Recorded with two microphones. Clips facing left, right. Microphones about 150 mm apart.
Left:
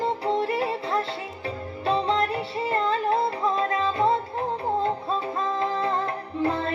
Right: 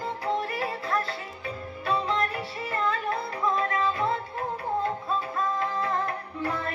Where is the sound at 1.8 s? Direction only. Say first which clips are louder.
Left 4 dB; 30° left (ahead or behind).